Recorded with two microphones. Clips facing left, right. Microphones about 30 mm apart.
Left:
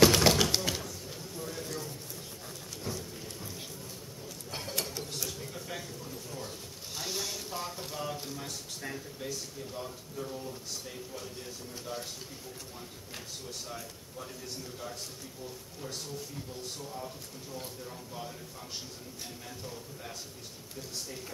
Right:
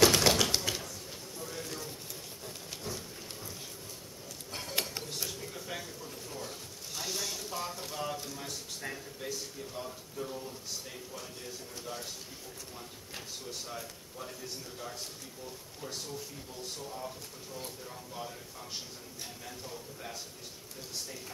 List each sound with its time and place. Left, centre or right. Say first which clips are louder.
0.0 s tap: left 2 dB; centre
0.4 s a sound: left 1 dB; centre
4.5 s dishes: left 1 dB; centre
5.4 s a sound: even; centre
7.1 s a sound: left 1 dB; centre
8.2 s a man's voice: left 1 dB; centre
13.1 s speech: right 1 dB; centre
15.8 s speech: even; centre
19.6 s speech: even; centre